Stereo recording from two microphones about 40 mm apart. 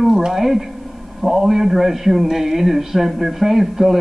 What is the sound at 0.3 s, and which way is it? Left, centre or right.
A man's voice, centre.